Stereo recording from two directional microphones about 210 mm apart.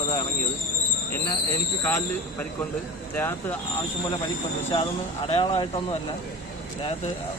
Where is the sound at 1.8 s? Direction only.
10° left (ahead or behind).